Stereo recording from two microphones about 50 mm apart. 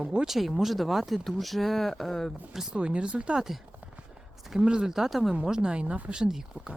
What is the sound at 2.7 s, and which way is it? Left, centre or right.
Speech, right.